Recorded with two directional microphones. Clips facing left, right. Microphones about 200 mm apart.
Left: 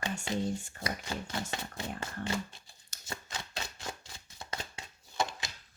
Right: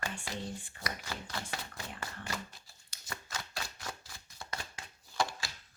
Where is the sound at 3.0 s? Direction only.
25° left (ahead or behind).